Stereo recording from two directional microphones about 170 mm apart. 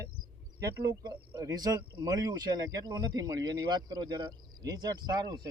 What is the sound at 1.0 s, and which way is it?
Speech, 25° right (ahead or behind).